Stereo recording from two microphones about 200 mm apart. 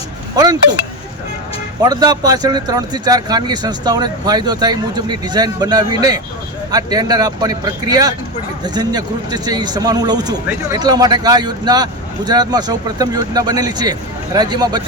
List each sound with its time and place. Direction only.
0.4 s a man's voice: 20° right (ahead or behind)
1.8 s a man's voice: 20° right (ahead or behind)